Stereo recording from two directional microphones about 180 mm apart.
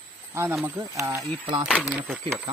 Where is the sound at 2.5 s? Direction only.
30° right (ahead or behind).